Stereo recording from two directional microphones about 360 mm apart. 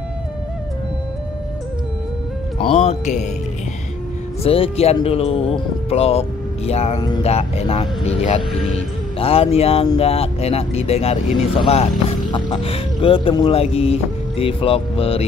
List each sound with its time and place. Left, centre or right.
2.6 s speech: centre
4.4 s speech: centre